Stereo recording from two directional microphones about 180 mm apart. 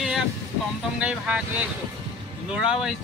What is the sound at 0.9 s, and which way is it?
Speech, 5° right (ahead or behind).